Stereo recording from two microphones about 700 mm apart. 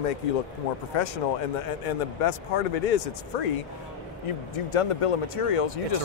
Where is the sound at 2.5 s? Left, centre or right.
Left.